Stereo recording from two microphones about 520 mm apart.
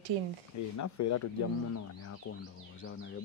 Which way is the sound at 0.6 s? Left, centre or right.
Left.